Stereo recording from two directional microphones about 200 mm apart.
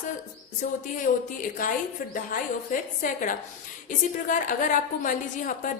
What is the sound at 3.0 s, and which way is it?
A woman's voice, 40° left (ahead or behind).